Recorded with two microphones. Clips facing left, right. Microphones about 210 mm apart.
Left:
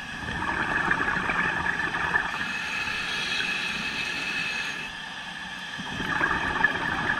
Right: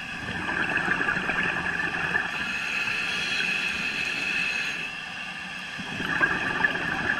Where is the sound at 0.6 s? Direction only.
25° right (ahead or behind).